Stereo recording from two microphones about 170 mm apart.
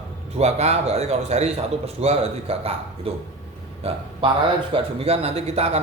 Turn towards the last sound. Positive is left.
turn(degrees=-40)  # may be behind; listen again after turning